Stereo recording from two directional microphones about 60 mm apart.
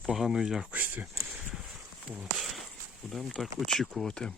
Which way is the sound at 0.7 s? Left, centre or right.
Right.